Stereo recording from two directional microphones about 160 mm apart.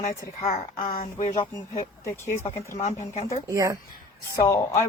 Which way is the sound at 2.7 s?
45° left (ahead or behind).